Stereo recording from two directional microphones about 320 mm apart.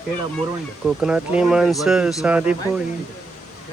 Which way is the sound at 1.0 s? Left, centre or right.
Centre.